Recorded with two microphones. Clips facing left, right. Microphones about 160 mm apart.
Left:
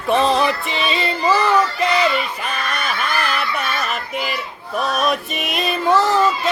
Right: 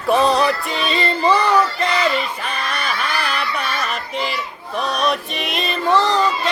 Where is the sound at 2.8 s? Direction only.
5° left (ahead or behind).